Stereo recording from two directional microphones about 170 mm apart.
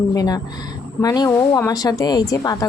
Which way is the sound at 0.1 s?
20° left (ahead or behind).